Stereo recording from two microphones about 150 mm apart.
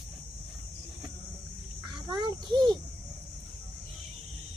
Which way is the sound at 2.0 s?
30° right (ahead or behind).